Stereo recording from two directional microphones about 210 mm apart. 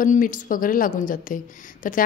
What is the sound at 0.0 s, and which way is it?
A woman's voice, 40° left (ahead or behind).